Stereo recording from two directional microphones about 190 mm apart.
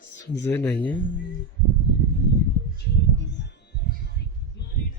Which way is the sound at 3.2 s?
65° left (ahead or behind).